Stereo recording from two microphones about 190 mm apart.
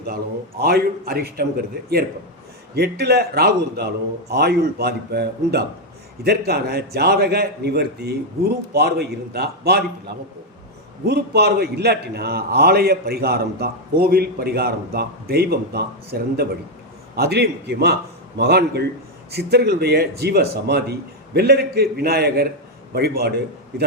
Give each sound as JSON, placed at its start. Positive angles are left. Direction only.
{"t": 0.6, "sound": "a man's voice", "side_deg": -55}